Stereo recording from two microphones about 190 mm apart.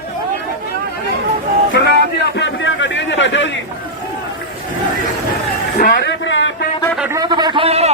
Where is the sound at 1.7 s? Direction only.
65° left (ahead or behind).